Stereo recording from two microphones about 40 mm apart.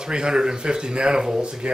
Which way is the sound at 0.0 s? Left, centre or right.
Centre.